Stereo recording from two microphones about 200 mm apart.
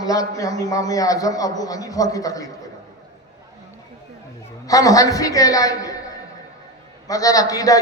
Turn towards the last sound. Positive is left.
turn(degrees=15)  # may be behind; listen again after turning